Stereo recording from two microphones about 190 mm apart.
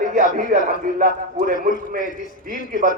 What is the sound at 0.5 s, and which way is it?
Speech, 55° right (ahead or behind).